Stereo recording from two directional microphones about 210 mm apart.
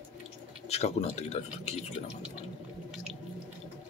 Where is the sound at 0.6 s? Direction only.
30° left (ahead or behind).